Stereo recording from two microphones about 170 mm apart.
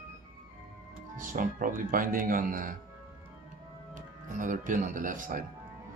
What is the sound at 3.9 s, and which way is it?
Speech, 50° right (ahead or behind).